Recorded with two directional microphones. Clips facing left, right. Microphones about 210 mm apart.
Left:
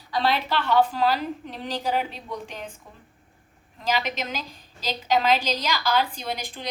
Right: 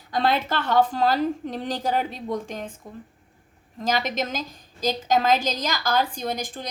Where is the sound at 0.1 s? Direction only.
50° right (ahead or behind).